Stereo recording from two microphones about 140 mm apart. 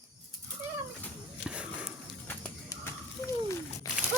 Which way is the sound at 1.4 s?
5° right (ahead or behind).